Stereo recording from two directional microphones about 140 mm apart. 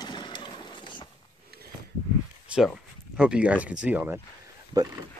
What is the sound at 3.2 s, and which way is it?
Speech, 5° right (ahead or behind).